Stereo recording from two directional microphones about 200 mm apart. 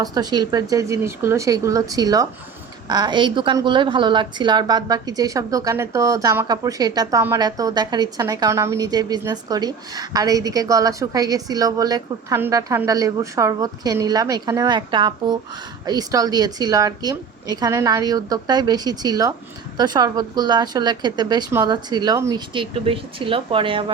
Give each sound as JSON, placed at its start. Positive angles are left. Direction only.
{"t": 0.0, "sound": "a woman's voice", "side_deg": -20}